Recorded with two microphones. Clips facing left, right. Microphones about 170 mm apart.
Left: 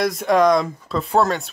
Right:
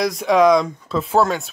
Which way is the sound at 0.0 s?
Centre (ahead or behind).